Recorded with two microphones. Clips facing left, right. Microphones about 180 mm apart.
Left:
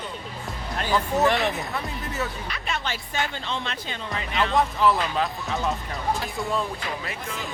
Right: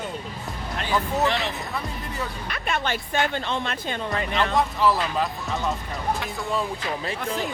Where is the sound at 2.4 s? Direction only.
55° right (ahead or behind).